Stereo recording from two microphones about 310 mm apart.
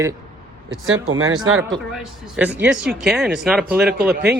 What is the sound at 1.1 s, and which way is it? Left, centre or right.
Speech, right.